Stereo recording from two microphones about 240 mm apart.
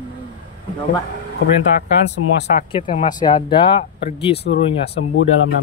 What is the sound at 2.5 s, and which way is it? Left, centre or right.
Speech, left.